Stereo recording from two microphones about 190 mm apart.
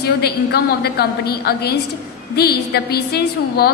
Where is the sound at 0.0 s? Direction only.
55° left (ahead or behind).